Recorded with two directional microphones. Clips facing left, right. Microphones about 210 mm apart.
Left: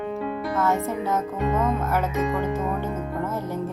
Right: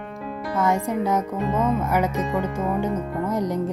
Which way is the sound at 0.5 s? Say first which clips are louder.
Right 3 dB; 15° right (ahead or behind).